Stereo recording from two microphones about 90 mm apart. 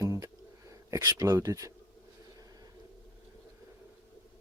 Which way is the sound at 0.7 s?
40° right (ahead or behind).